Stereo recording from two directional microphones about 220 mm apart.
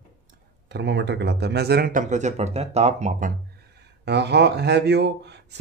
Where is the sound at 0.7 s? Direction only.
50° right (ahead or behind); by 3.3 s 30° right (ahead or behind).